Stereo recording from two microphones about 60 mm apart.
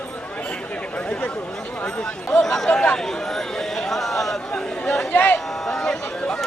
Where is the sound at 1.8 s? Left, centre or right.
Centre.